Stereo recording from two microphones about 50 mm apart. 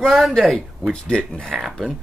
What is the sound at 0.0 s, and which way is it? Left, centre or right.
Speech, centre.